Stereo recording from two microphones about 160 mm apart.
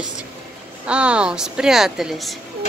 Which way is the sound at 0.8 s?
5° right (ahead or behind).